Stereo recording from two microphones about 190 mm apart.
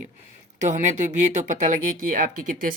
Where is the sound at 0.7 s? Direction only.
40° right (ahead or behind).